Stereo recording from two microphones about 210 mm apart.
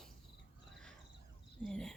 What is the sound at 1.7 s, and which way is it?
Speech, 5° left (ahead or behind).